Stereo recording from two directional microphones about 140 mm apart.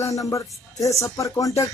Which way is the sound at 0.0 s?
25° left (ahead or behind).